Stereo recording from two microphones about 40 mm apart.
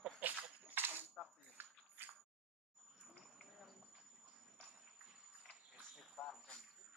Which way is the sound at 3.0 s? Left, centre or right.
Centre.